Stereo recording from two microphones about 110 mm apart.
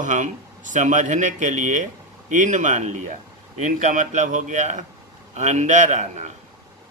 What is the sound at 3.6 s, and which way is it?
Speech, 90° right.